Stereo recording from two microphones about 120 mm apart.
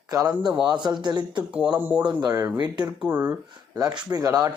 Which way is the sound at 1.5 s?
10° right (ahead or behind).